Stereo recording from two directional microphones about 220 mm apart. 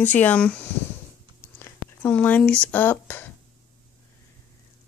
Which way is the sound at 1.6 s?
10° left (ahead or behind).